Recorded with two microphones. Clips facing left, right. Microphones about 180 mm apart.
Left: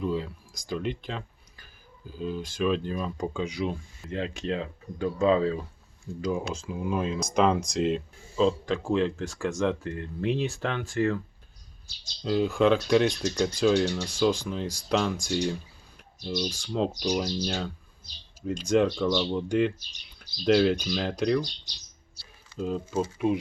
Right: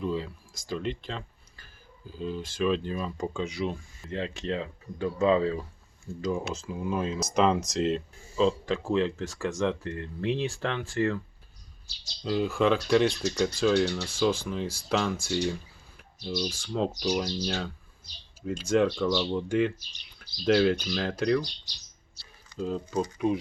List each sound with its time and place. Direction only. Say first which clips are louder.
0.0 s speech: left 1 dB; centre (ahead or behind)
12.2 s speech: left 2 dB; centre (ahead or behind)
13.1 s speech: even; 15° left (ahead or behind)
14.3 s speech: left 1 dB; 5° right (ahead or behind)
15.2 s speech: left 1 dB; 15° left (ahead or behind)
16.7 s speech: left 1 dB; 5° left (ahead or behind)
18.9 s speech: left 1 dB; 10° left (ahead or behind)